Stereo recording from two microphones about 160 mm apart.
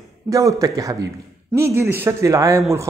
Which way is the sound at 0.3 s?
20° right (ahead or behind).